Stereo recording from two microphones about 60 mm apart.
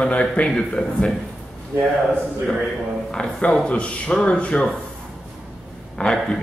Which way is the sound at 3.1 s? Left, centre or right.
Centre.